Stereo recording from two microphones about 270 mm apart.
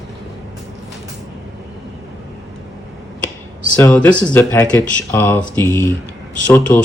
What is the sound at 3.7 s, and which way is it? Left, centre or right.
Speech, centre.